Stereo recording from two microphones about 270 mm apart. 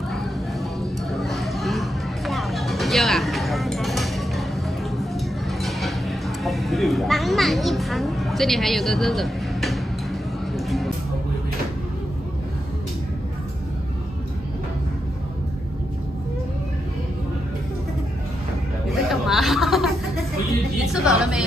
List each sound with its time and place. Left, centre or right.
1.1 s a sound: centre
18.9 s chatter: centre
20.8 s music: centre